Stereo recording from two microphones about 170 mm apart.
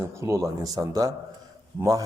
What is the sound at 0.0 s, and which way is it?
A man's voice, 15° right (ahead or behind).